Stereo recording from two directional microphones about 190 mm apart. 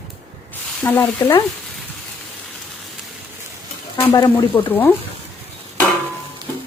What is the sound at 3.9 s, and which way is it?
Speech, 15° left (ahead or behind).